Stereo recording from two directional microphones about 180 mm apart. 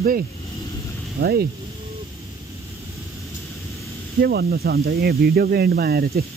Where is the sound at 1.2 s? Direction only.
60° right (ahead or behind).